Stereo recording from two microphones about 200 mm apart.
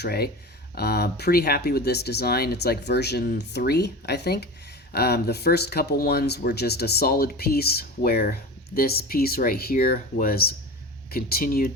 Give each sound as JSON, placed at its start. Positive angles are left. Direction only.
{"t": 0.0, "sound": "speech", "side_deg": 50}